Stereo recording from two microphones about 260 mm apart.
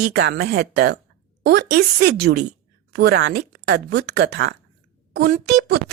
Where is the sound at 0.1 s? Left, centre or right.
Right.